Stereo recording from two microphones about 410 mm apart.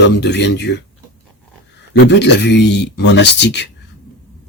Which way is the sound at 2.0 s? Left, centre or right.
Left.